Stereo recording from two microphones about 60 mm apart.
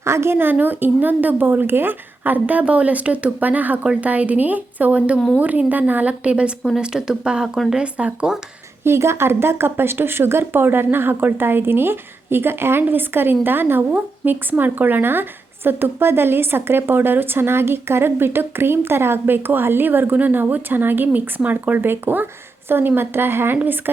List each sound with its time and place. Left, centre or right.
0.0 s a woman's voice: right; by 8.3 s centre
8.8 s speech: right